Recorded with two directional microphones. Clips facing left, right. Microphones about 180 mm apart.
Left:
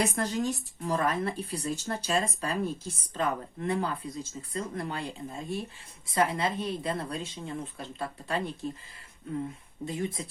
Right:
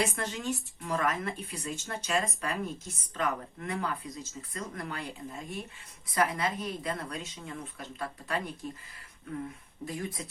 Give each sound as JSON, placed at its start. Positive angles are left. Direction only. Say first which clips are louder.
{"t": 0.0, "sound": "speech", "louder": "left 4 dB", "side_deg": 40}
{"t": 9.8, "sound": "speech", "louder": "left 4 dB", "side_deg": 25}